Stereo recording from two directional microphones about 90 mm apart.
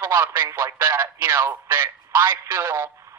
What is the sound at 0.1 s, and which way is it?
Speech, 25° right (ahead or behind).